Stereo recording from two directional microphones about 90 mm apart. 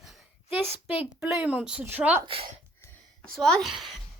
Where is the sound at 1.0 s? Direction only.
10° right (ahead or behind).